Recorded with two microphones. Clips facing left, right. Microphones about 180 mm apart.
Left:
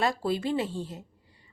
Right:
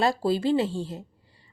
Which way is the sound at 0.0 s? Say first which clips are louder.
Right 4 dB; 30° right (ahead or behind).